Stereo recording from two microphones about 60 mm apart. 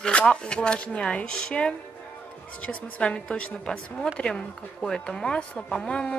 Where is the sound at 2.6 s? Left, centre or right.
Left.